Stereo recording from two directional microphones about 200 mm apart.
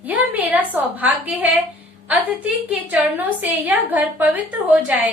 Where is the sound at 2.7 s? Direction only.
10° right (ahead or behind).